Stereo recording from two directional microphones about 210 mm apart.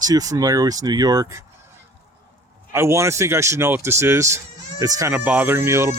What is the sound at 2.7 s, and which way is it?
Speech, 15° right (ahead or behind).